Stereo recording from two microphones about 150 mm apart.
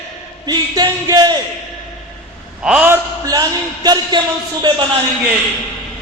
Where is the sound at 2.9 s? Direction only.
25° right (ahead or behind).